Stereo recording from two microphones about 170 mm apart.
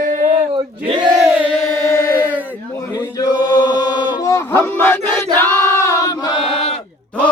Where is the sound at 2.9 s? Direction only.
20° left (ahead or behind).